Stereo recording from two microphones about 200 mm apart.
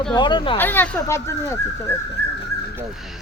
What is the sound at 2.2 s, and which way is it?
Dog, 55° right (ahead or behind).